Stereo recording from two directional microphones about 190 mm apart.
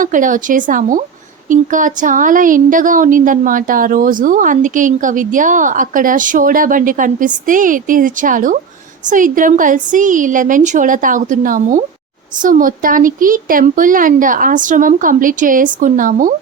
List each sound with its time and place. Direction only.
0.0 s speech: 45° right (ahead or behind)